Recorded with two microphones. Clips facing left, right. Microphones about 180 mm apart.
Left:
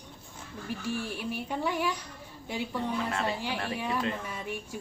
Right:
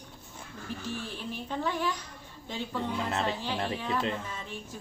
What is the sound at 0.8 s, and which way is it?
A woman's voice, 10° left (ahead or behind).